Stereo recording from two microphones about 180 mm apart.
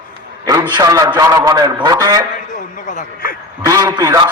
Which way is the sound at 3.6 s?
20° right (ahead or behind).